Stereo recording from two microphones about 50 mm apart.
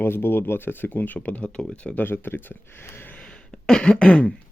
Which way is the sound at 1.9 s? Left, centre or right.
Left.